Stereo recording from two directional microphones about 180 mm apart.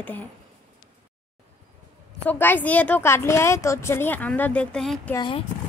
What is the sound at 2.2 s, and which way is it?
A woman's voice, 10° left (ahead or behind).